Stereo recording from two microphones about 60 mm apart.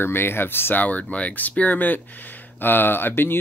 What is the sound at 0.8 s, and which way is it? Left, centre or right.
Speech, left.